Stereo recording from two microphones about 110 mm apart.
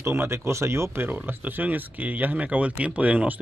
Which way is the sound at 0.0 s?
20° right (ahead or behind).